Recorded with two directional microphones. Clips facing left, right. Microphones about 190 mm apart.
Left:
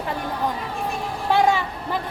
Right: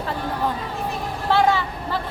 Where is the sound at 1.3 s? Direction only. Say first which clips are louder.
Even; 15° left (ahead or behind).